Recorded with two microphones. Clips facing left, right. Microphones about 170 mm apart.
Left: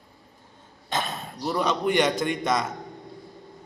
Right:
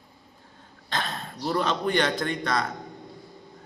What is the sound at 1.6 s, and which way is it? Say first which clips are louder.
A man's voice: left 4 dB; 15° left (ahead or behind).